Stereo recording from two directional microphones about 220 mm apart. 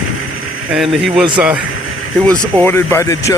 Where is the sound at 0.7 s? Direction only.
Centre (ahead or behind).